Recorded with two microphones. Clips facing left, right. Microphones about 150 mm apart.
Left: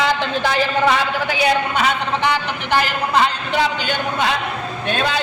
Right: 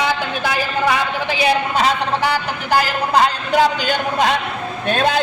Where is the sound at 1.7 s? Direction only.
40° right (ahead or behind).